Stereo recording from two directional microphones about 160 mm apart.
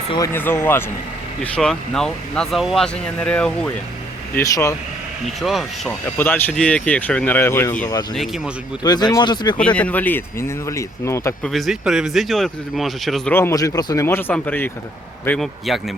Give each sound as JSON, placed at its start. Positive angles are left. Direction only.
{"t": 0.3, "sound": "speech", "side_deg": 15}
{"t": 4.4, "sound": "speech", "side_deg": 20}
{"t": 5.2, "sound": "speech", "side_deg": 0}
{"t": 6.1, "sound": "speech", "side_deg": 10}
{"t": 8.1, "sound": "speech", "side_deg": 0}
{"t": 8.8, "sound": "speech", "side_deg": 25}
{"t": 9.6, "sound": "speech", "side_deg": 10}
{"t": 11.4, "sound": "speech", "side_deg": 0}
{"t": 13.3, "sound": "speech", "side_deg": 15}
{"t": 15.4, "sound": "speech", "side_deg": 0}